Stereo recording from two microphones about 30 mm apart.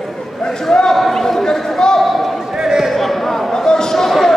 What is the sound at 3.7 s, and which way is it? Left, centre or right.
Basketball bounce, centre.